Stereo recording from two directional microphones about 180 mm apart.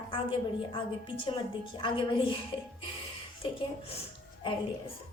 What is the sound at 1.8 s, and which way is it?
Speech, 30° left (ahead or behind).